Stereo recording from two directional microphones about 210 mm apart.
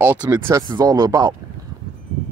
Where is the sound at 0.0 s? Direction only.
10° right (ahead or behind).